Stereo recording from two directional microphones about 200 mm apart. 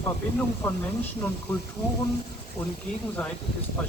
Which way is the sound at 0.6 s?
5° left (ahead or behind).